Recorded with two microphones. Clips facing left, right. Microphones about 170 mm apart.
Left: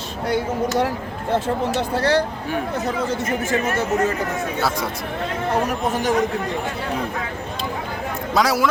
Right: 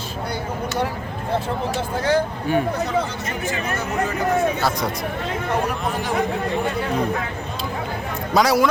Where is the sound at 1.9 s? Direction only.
75° left (ahead or behind).